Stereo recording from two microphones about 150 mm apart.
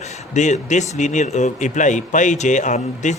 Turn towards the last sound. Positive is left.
turn(degrees=55)  # may be behind; listen again after turning